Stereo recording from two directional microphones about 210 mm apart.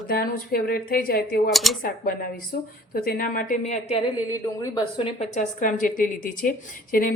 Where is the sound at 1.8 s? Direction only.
45° left (ahead or behind).